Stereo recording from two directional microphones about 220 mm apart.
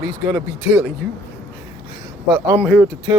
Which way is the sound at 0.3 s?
5° right (ahead or behind).